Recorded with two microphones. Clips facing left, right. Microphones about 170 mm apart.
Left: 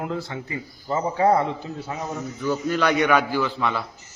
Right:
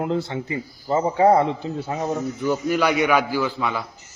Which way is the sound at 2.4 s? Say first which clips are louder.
Right 1 dB; 15° right (ahead or behind).